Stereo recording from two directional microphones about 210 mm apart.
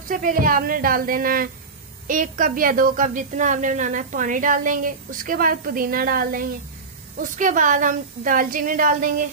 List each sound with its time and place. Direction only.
0.1 s a woman's voice: 40° right (ahead or behind)